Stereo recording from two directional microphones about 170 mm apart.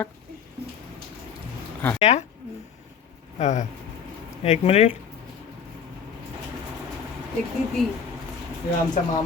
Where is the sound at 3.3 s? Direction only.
45° left (ahead or behind).